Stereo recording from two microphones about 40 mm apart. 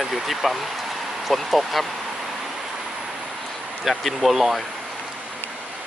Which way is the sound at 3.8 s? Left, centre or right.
Centre.